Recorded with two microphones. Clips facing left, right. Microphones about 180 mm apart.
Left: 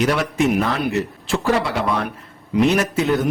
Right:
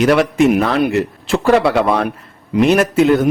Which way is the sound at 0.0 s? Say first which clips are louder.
Right 7 dB; 60° right (ahead or behind).